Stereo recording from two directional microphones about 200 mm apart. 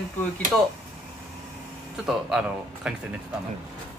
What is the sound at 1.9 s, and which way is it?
Speech, 5° right (ahead or behind).